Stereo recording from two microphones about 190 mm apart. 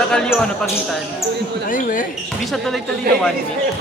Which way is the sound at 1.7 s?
45° left (ahead or behind).